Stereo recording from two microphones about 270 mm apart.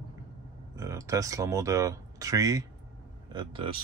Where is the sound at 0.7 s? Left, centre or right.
Centre.